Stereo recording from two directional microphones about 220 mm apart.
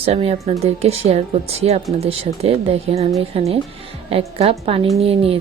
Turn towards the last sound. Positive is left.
turn(degrees=-25)  # may be behind; listen again after turning